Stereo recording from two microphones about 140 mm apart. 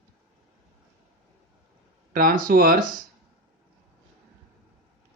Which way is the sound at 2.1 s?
80° right.